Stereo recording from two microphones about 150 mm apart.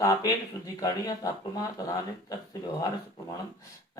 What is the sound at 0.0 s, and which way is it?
Speech, 25° left (ahead or behind).